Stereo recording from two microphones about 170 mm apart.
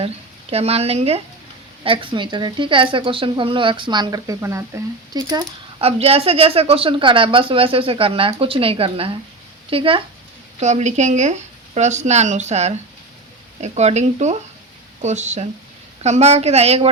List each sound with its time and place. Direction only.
0.5 s a woman's voice: 35° right (ahead or behind)
6.0 s a woman's voice: 35° right (ahead or behind)
10.6 s a woman's voice: 40° right (ahead or behind)